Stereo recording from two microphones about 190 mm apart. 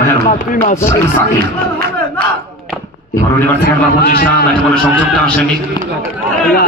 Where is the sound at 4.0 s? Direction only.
55° left (ahead or behind).